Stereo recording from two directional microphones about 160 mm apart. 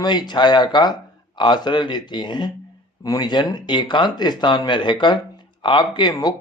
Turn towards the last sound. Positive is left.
turn(degrees=25)  # may be behind; listen again after turning